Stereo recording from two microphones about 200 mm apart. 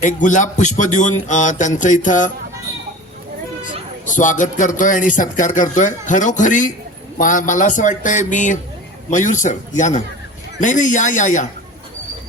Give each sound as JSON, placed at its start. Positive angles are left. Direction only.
{"t": 0.0, "sound": "a man's voice", "side_deg": 40}
{"t": 4.0, "sound": "a man's voice", "side_deg": 40}